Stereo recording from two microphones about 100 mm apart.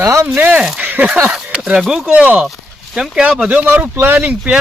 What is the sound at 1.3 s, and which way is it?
Speech, 10° right (ahead or behind).